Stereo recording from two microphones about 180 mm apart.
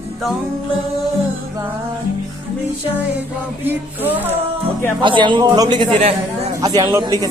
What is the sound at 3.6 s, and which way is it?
Speech, 10° right (ahead or behind).